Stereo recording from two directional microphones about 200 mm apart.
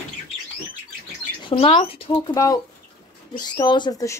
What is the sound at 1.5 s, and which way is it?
Speech, 25° left (ahead or behind).